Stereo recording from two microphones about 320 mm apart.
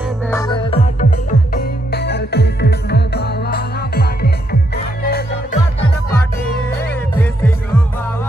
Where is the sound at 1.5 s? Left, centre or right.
Left.